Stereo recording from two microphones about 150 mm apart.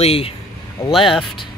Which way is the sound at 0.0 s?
40° left (ahead or behind).